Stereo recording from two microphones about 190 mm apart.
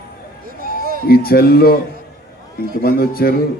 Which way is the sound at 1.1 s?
55° left (ahead or behind).